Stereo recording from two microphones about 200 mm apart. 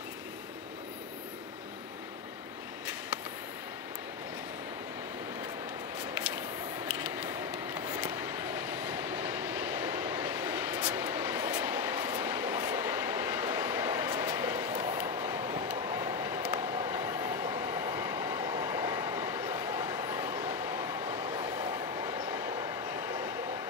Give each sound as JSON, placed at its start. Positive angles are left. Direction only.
{"t": 7.0, "sound": "a sound", "side_deg": -10}
{"t": 8.0, "sound": "train", "side_deg": -10}
{"t": 21.0, "sound": "train", "side_deg": -25}